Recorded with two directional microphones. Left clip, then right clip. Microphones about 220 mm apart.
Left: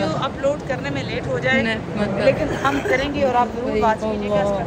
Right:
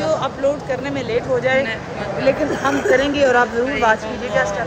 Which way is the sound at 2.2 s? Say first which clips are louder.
Right 1 dB; 50° right (ahead or behind).